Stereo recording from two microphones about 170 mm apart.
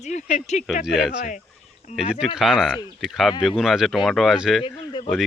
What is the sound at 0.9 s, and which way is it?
Speech, 5° right (ahead or behind).